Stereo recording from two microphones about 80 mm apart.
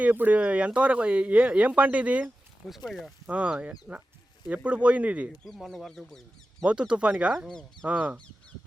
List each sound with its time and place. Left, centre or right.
0.0 s speech: centre
2.2 s speech: centre
3.2 s speech: centre
5.5 s speech: centre
6.7 s speech: centre
7.3 s speech: centre
7.9 s speech: centre